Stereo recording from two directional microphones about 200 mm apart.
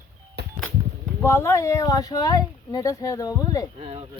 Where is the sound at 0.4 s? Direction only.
55° right (ahead or behind).